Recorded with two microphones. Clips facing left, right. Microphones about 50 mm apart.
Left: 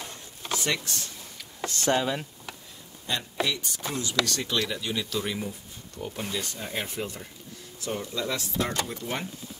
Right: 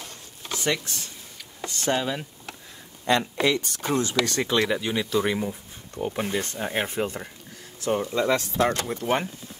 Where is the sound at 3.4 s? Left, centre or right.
Right.